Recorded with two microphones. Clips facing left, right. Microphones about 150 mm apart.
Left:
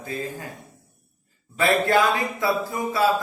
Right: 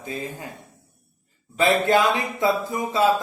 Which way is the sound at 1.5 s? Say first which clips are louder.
Right 1 dB; 20° right (ahead or behind).